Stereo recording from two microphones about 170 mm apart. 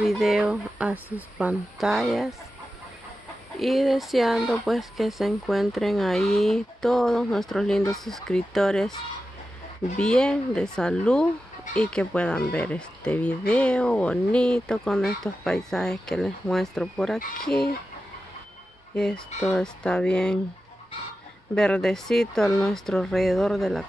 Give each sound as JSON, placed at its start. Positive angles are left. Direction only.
{"t": 0.0, "sound": "speech", "side_deg": 0}
{"t": 3.5, "sound": "speech", "side_deg": 0}
{"t": 9.9, "sound": "speech", "side_deg": 5}
{"t": 17.2, "sound": "speech", "side_deg": 65}
{"t": 18.9, "sound": "speech", "side_deg": 5}
{"t": 21.5, "sound": "speech", "side_deg": 5}